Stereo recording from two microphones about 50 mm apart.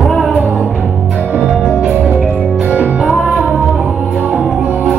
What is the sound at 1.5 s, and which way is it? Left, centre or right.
Music, centre.